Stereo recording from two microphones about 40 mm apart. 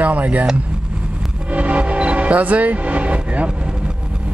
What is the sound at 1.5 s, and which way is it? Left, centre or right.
Speech, right.